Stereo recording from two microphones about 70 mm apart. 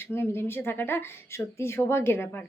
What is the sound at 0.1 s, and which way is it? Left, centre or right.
Speech, left.